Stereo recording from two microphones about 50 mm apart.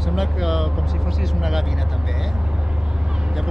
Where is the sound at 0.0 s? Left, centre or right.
Centre.